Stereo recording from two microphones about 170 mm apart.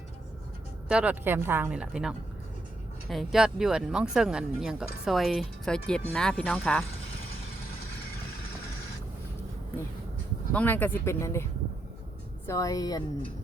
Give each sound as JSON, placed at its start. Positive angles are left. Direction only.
{"t": 0.9, "sound": "speech", "side_deg": -5}
{"t": 10.5, "sound": "speech", "side_deg": 10}
{"t": 12.5, "sound": "a woman's voice", "side_deg": 20}